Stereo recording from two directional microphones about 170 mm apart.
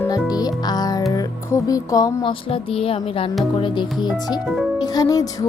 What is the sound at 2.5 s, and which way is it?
A woman's voice, 35° left (ahead or behind).